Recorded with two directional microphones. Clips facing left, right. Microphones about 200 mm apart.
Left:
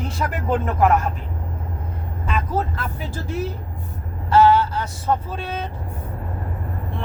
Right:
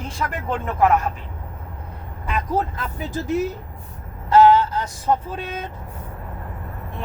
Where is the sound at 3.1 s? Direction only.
15° right (ahead or behind).